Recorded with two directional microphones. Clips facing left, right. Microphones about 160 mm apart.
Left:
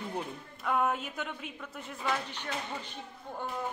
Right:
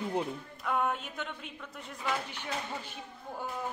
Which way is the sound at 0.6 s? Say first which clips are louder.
Left 2 dB; centre (ahead or behind).